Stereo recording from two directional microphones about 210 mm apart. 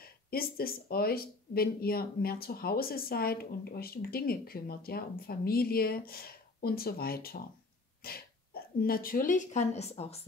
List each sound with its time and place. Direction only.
0.0 s speech: 45° left (ahead or behind); by 10.2 s 30° left (ahead or behind)